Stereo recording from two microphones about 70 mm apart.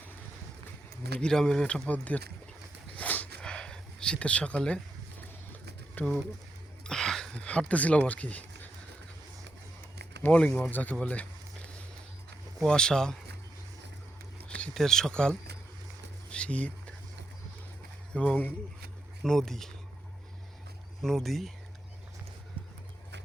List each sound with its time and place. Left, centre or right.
1.2 s speech: centre
2.9 s a sound: left
6.0 s speech: left
6.8 s a sound: centre
7.4 s speech: centre
10.3 s speech: centre
10.7 s speech: left
11.0 s a sound: centre
12.6 s speech: centre
14.4 s a sound: centre
14.7 s speech: centre
18.1 s speech: left
19.2 s speech: centre
21.0 s speech: centre